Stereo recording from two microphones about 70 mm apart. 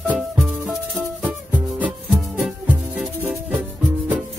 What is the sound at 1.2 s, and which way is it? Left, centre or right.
Music, right.